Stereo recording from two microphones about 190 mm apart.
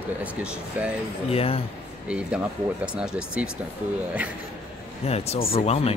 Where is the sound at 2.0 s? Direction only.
5° right (ahead or behind).